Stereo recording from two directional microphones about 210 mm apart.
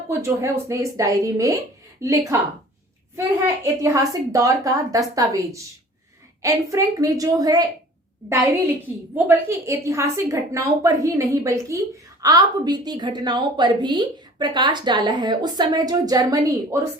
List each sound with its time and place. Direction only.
0.1 s a woman's voice: 15° right (ahead or behind)